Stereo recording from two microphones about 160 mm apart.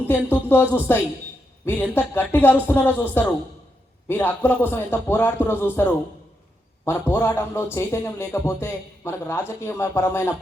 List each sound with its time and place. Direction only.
0.3 s speech: 15° left (ahead or behind)